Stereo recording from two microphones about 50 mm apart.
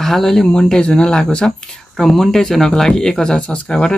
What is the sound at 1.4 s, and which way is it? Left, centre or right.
Speech, centre.